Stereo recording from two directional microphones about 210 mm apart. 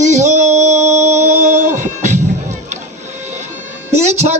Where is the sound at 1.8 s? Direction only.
35° right (ahead or behind).